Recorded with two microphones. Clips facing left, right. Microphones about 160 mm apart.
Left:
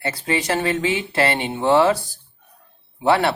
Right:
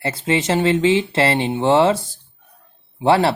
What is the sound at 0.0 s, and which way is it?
Speech, 25° right (ahead or behind).